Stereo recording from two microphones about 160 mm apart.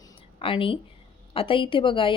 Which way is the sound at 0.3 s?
35° left (ahead or behind).